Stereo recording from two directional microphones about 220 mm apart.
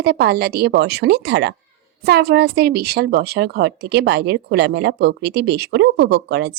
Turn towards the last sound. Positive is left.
turn(degrees=-50)  # may be behind; listen again after turning